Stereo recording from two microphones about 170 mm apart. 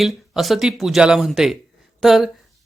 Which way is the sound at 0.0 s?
Centre (ahead or behind).